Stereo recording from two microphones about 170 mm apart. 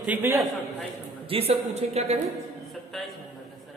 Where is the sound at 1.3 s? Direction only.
35° right (ahead or behind).